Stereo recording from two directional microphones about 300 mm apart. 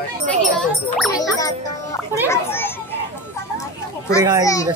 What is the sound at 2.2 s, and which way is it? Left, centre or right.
Speech, centre.